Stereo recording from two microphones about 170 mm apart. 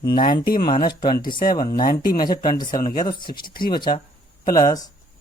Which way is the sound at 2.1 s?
60° left (ahead or behind).